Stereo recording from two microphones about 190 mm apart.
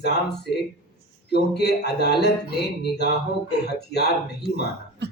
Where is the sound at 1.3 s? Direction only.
60° left (ahead or behind).